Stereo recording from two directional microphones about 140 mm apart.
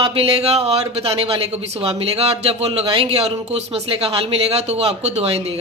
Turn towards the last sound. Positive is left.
turn(degrees=-45)  # may be behind; listen again after turning